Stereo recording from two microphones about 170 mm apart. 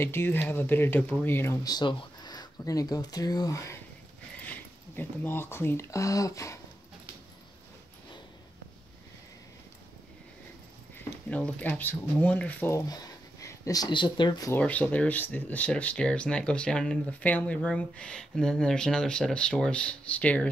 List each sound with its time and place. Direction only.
0.0 s speech: 15° left (ahead or behind)
11.2 s speech: 10° left (ahead or behind)
14.6 s speech: 10° left (ahead or behind)